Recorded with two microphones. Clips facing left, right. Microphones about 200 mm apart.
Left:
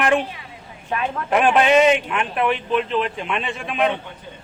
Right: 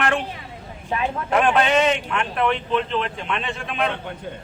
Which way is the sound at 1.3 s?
10° left (ahead or behind).